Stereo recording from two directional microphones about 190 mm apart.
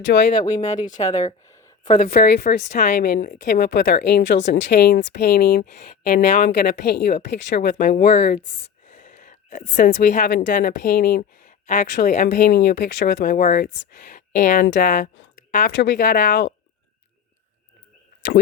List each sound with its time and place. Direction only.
0.1 s a woman's voice: 55° left (ahead or behind)
0.5 s speech: 40° left (ahead or behind)
1.9 s a woman's voice: 50° left (ahead or behind)
8.9 s a sound: 40° left (ahead or behind)
10.4 s speech: 45° left (ahead or behind); by 13.1 s 60° left (ahead or behind)
13.1 s speech: 50° left (ahead or behind)
15.4 s a sound: 45° left (ahead or behind)
15.7 s speech: 65° left (ahead or behind)